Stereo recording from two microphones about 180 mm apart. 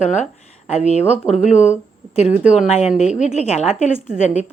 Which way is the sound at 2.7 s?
35° left (ahead or behind).